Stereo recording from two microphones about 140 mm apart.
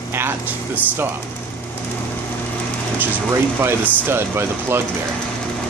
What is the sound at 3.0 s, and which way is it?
Speech, 15° right (ahead or behind).